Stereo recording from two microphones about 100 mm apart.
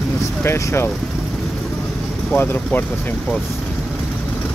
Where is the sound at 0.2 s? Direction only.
30° left (ahead or behind).